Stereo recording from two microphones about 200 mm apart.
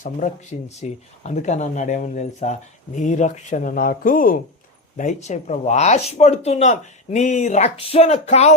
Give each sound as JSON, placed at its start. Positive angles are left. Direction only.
{"t": 0.7, "sound": "speech", "side_deg": 35}